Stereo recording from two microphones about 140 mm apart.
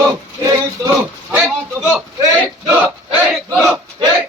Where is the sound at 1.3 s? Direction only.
10° right (ahead or behind).